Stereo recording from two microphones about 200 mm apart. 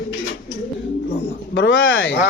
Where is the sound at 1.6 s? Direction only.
70° left (ahead or behind).